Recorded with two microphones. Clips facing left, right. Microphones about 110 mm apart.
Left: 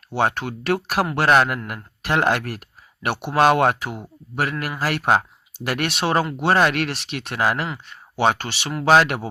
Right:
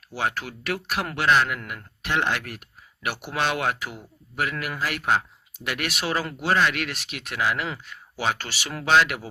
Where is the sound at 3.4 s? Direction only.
45° left (ahead or behind).